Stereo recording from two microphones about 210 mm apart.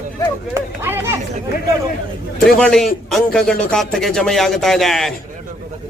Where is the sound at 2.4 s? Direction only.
Centre (ahead or behind).